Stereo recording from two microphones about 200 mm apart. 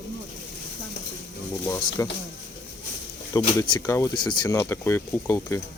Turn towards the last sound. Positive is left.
turn(degrees=10)  # may be behind; listen again after turning